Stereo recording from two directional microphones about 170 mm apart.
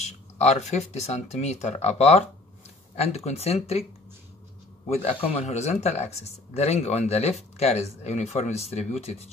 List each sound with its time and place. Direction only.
0.0 s speech: 40° left (ahead or behind)
4.8 s speech: 40° left (ahead or behind)